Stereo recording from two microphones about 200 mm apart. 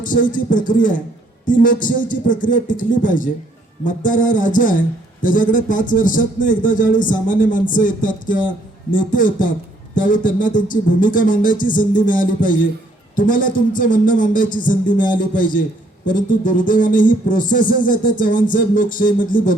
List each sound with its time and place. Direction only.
0.0 s a man's voice: 40° left (ahead or behind)